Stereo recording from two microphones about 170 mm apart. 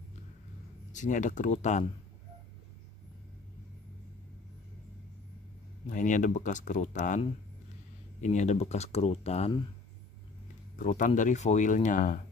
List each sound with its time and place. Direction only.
0.9 s speech: 50° left (ahead or behind)
5.9 s speech: 50° left (ahead or behind)
8.2 s speech: 45° left (ahead or behind)
10.8 s speech: 50° left (ahead or behind)